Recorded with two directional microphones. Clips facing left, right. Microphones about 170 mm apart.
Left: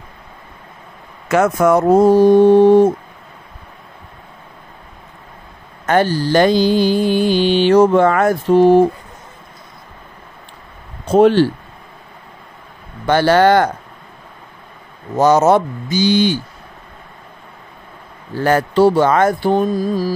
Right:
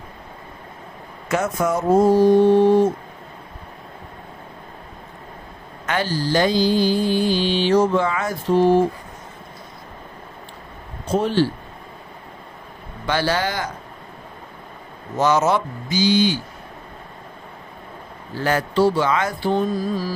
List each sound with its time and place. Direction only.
1.3 s mantra: 75° left (ahead or behind); by 2.9 s 55° left (ahead or behind)
5.9 s mantra: 55° left (ahead or behind)
11.1 s speech: 65° left (ahead or behind)
13.0 s mantra: 55° left (ahead or behind)
15.1 s speech: 40° left (ahead or behind); by 16.3 s 60° left (ahead or behind)
18.3 s speech: 50° left (ahead or behind)